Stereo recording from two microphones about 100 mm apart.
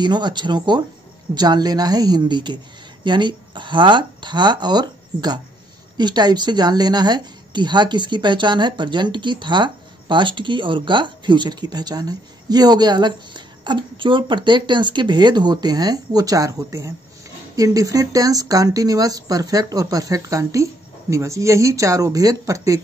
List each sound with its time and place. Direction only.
0.0 s speech: 50° right (ahead or behind)